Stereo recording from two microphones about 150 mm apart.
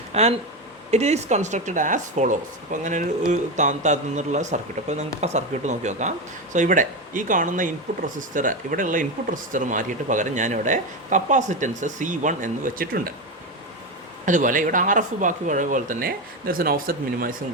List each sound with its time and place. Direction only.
0.1 s a man's voice: 45° right (ahead or behind); by 13.1 s 75° right (ahead or behind)
14.3 s speech: 60° right (ahead or behind)